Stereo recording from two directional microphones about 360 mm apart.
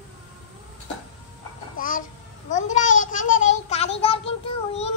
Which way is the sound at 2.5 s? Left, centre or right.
Centre.